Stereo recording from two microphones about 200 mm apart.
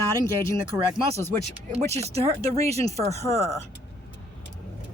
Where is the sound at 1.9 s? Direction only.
30° right (ahead or behind).